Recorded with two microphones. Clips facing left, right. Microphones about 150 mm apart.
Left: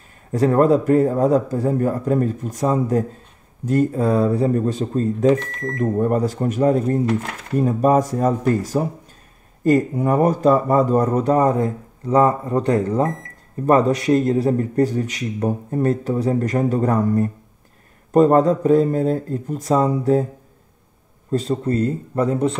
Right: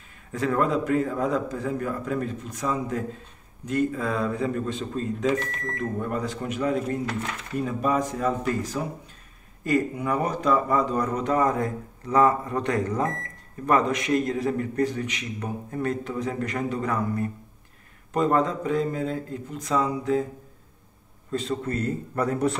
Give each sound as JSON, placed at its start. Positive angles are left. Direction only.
{"t": 0.3, "sound": "a man's voice", "side_deg": 40}
{"t": 21.3, "sound": "speech", "side_deg": 35}